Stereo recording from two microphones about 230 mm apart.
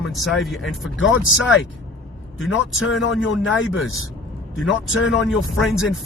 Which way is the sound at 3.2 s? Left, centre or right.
Left.